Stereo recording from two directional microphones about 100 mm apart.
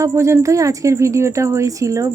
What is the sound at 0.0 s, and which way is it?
A woman's voice, 30° right (ahead or behind).